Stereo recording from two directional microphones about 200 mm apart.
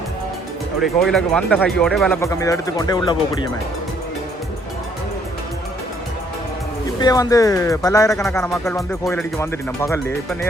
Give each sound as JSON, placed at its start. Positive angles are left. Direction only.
{"t": 0.8, "sound": "speech", "side_deg": 0}
{"t": 2.2, "sound": "speech", "side_deg": 15}
{"t": 7.0, "sound": "speech", "side_deg": 15}